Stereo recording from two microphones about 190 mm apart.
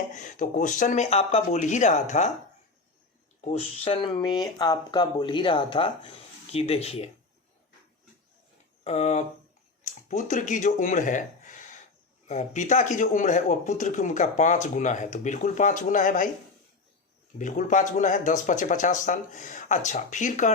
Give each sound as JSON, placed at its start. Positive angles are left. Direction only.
{"t": 0.2, "sound": "speech", "side_deg": 40}
{"t": 3.4, "sound": "speech", "side_deg": 35}
{"t": 8.8, "sound": "speech", "side_deg": 35}
{"t": 17.3, "sound": "speech", "side_deg": 40}